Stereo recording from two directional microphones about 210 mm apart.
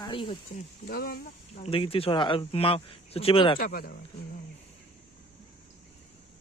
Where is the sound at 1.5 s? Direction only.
25° left (ahead or behind).